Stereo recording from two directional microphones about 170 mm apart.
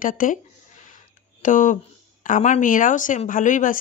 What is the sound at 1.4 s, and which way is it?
Speech, 50° left (ahead or behind).